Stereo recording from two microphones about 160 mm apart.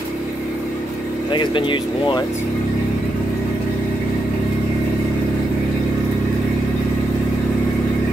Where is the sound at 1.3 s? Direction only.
30° left (ahead or behind).